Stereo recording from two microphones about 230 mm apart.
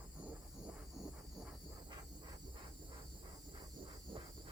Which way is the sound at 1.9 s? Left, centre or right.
Centre.